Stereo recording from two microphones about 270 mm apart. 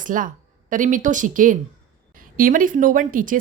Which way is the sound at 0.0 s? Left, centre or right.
Right.